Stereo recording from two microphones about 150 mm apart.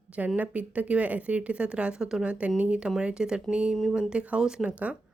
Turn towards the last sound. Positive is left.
turn(degrees=-10)  # may be behind; listen again after turning